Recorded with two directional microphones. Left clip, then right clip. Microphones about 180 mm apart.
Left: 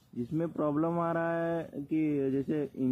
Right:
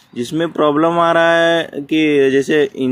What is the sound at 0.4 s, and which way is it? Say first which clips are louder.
Speech: right 17 dB; 30° right (ahead or behind).